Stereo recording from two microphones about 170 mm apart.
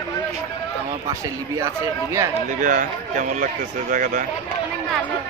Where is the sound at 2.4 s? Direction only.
50° right (ahead or behind).